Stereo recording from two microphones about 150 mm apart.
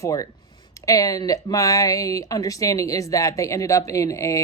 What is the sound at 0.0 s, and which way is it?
Speech, 20° left (ahead or behind).